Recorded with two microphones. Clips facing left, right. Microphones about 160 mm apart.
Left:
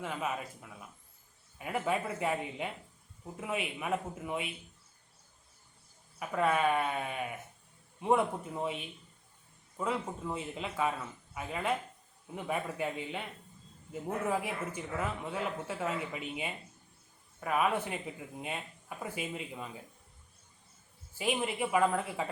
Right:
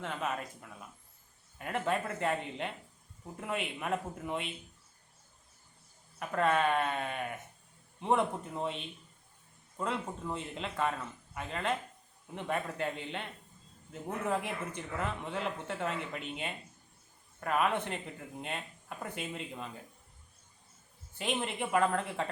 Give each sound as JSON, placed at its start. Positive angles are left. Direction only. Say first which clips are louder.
{"t": 0.0, "sound": "speech", "louder": "even", "side_deg": 5}
{"t": 6.1, "sound": "a man's voice", "louder": "even", "side_deg": 5}
{"t": 21.2, "sound": "speech", "louder": "left 2 dB", "side_deg": 5}